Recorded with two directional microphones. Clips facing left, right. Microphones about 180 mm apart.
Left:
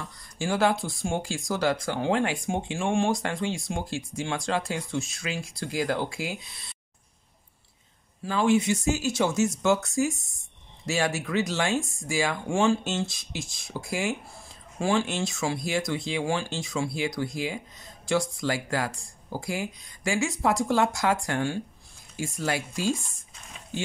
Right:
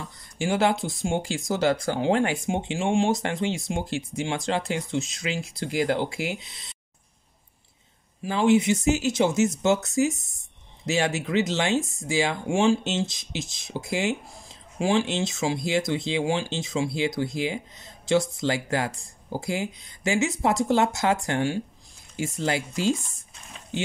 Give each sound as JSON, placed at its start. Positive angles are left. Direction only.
{"t": 0.4, "sound": "speech", "side_deg": -20}
{"t": 8.2, "sound": "speech", "side_deg": -20}